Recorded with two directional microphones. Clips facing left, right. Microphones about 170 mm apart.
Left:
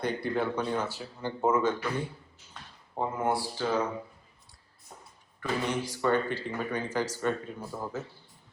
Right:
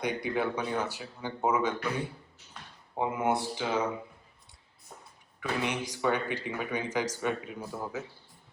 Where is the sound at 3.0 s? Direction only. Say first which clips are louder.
Right 1 dB; 15° right (ahead or behind).